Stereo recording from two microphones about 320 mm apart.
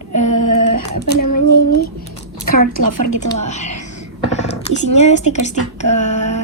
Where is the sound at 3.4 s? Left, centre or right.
Left.